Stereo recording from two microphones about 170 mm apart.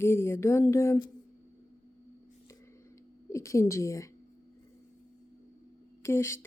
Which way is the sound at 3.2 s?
15° left (ahead or behind).